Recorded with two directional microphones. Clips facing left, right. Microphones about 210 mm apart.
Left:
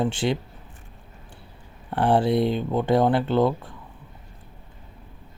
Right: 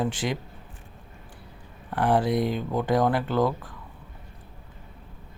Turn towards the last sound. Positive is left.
turn(degrees=25)  # may be behind; listen again after turning